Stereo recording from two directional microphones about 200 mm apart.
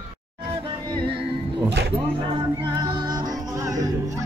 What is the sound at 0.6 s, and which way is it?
Music, 25° right (ahead or behind).